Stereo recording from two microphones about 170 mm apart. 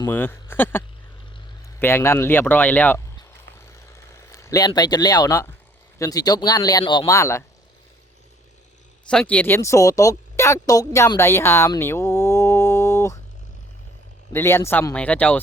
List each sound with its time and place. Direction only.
0.1 s speech: 10° left (ahead or behind)
3.7 s a sound: 15° left (ahead or behind)
6.0 s speech: 20° left (ahead or behind)
9.0 s speech: 5° left (ahead or behind)
14.3 s speech: 15° left (ahead or behind)